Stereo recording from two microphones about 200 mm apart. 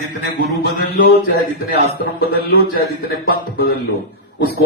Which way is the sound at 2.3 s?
50° left (ahead or behind).